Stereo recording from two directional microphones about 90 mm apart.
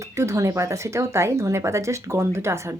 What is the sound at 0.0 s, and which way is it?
Speech, 35° right (ahead or behind).